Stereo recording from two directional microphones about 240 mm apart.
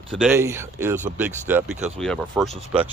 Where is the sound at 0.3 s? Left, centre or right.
Centre.